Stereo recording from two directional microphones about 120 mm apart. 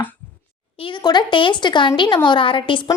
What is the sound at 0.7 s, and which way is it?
A woman's voice, 45° left (ahead or behind).